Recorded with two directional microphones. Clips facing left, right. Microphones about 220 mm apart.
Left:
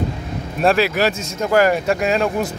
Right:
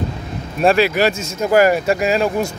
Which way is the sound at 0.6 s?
Centre (ahead or behind).